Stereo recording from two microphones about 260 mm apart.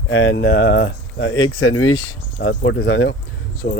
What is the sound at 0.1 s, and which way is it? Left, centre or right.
Speech, left.